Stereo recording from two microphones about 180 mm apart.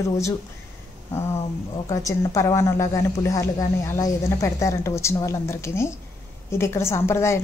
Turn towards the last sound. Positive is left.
turn(degrees=15)  # may be behind; listen again after turning